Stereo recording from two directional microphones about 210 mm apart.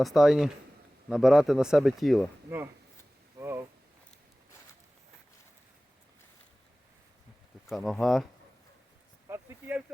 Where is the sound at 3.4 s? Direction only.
10° right (ahead or behind).